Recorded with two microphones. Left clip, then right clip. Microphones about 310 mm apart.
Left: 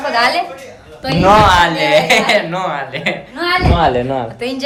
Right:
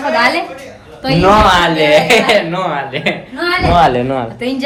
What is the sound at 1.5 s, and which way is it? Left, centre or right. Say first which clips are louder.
A man's voice: right 1 dB; centre.